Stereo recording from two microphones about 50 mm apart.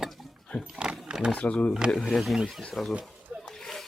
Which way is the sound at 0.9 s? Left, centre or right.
Centre.